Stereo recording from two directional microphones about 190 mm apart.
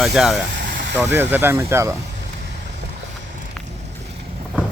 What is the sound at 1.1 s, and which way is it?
Speech, 10° right (ahead or behind).